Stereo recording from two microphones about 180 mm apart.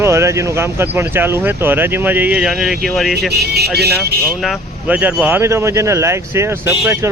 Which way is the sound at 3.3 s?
65° right (ahead or behind).